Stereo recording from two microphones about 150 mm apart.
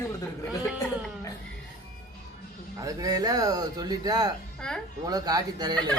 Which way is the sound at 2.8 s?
25° right (ahead or behind).